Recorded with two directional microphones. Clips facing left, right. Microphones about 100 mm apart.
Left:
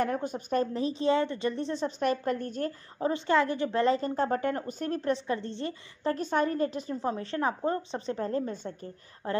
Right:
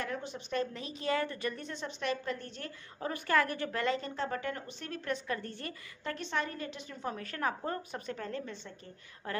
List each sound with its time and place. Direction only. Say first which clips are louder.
0.0 s a woman's voice: left 9 dB; 45° left (ahead or behind)
3.0 s speech: left 5 dB; 25° left (ahead or behind)
3.8 s a woman's voice: left 8 dB; 40° left (ahead or behind)
6.1 s a woman's voice: left 8 dB; 45° left (ahead or behind)